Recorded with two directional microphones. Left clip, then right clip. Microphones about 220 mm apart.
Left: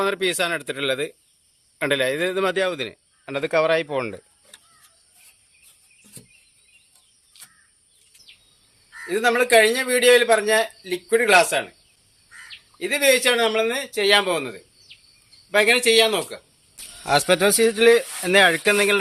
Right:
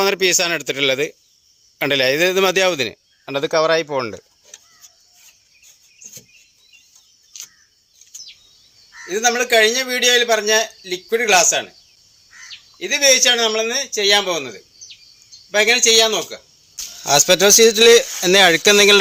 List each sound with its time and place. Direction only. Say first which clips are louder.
0.0 s a man's voice: right 6 dB; 30° right (ahead or behind)
9.0 s a man's voice: right 1 dB; centre (ahead or behind)
12.7 s a man's voice: right 4 dB; centre (ahead or behind)
17.0 s speech: right 5 dB; 35° right (ahead or behind)